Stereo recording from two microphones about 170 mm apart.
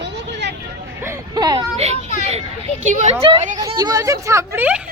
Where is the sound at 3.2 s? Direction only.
30° right (ahead or behind); by 4.8 s 10° right (ahead or behind).